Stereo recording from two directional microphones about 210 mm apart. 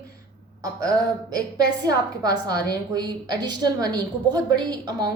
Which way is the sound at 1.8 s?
20° right (ahead or behind).